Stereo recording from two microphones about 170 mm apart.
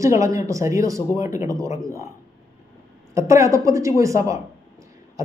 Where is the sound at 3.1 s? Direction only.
15° right (ahead or behind).